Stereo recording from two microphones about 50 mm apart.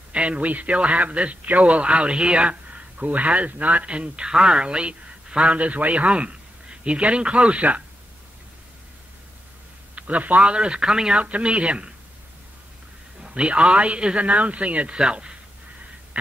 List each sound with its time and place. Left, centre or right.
0.1 s a man's voice: right
9.9 s a man's voice: right
13.2 s a man's voice: right